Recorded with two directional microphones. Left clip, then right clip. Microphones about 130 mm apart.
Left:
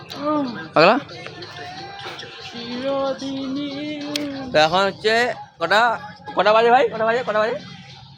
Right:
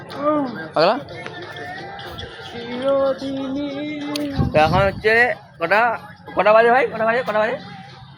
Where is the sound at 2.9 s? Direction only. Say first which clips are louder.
Right 5 dB; 25° left (ahead or behind).